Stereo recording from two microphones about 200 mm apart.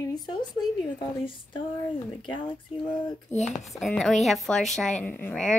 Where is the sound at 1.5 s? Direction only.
25° left (ahead or behind).